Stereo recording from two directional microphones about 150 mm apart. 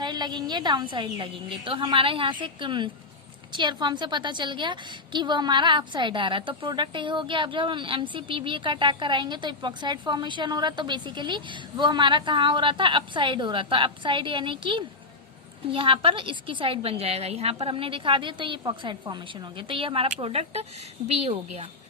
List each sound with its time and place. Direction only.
0.0 s a woman's voice: 30° right (ahead or behind); by 21.7 s 45° right (ahead or behind)